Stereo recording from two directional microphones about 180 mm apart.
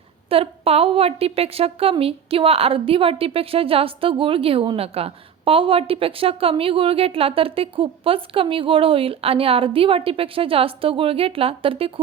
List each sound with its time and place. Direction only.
0.3 s a woman's voice: 30° right (ahead or behind)